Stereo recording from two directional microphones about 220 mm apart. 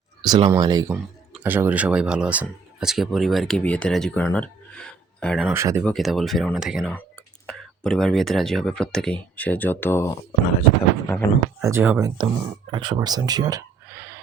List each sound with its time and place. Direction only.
0.2 s speech: 20° right (ahead or behind); by 5.5 s centre (ahead or behind)
5.5 s speech: 15° right (ahead or behind)
5.8 s speech: centre (ahead or behind)
11.6 s speech: 10° right (ahead or behind)